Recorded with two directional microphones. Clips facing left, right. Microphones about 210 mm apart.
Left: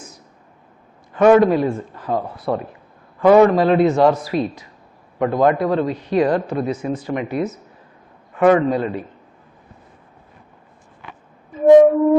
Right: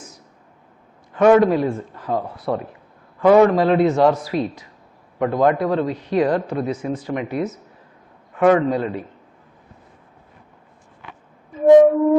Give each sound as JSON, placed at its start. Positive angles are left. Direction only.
{"t": 1.1, "sound": "speech", "side_deg": 15}
{"t": 5.2, "sound": "speech", "side_deg": 15}
{"t": 11.6, "sound": "flute", "side_deg": 20}